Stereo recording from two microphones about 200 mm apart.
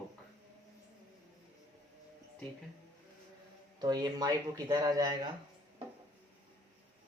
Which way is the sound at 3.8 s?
20° right (ahead or behind).